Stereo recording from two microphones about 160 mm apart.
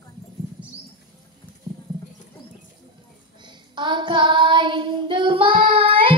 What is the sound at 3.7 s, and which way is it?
Child singing, 30° right (ahead or behind).